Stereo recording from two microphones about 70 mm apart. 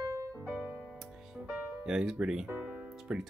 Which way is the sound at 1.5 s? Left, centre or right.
Centre.